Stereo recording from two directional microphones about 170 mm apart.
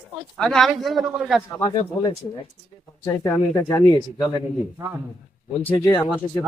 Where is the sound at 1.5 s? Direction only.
20° left (ahead or behind).